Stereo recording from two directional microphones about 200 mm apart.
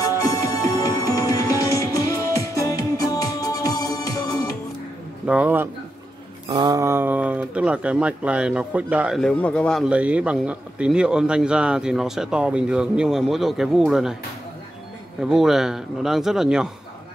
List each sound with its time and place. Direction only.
0.0 s music: 20° left (ahead or behind)
5.2 s a man's voice: 5° right (ahead or behind)
6.4 s speech: 20° right (ahead or behind); by 14.1 s centre (ahead or behind)
15.2 s speech: centre (ahead or behind)